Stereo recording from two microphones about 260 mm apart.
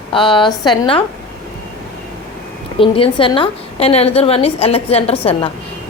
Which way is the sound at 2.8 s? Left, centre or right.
Centre.